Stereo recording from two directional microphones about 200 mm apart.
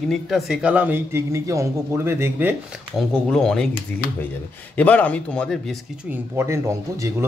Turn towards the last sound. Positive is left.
turn(degrees=-15)  # may be behind; listen again after turning